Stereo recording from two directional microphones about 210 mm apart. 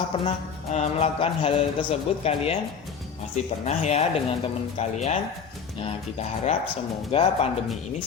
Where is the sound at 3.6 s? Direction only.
35° left (ahead or behind).